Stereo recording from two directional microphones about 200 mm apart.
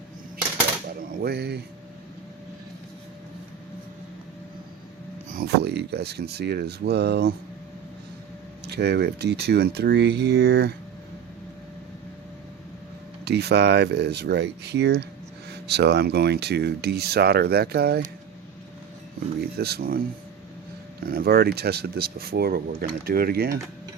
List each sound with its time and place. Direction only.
0.9 s speech: 50° right (ahead or behind)
5.3 s speech: 50° right (ahead or behind)
8.6 s speech: 55° right (ahead or behind)
13.2 s speech: 55° right (ahead or behind)
19.4 s speech: 50° right (ahead or behind)
21.0 s speech: 50° right (ahead or behind)